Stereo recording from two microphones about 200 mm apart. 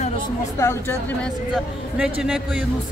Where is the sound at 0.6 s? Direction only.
10° left (ahead or behind).